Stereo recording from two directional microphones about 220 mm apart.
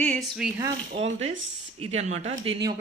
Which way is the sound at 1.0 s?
30° right (ahead or behind).